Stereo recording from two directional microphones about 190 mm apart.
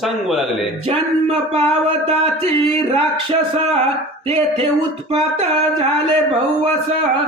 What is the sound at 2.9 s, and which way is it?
Speech, 30° right (ahead or behind).